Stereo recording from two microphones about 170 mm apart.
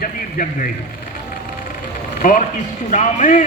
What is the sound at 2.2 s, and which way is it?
A man's voice, 50° left (ahead or behind).